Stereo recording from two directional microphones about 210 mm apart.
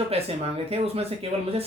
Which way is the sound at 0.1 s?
30° right (ahead or behind).